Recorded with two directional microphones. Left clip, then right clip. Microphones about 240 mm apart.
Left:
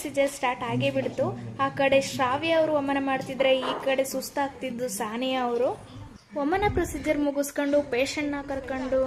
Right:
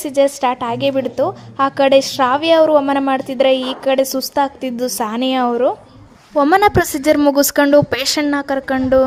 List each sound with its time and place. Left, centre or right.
0.0 s a woman's voice: right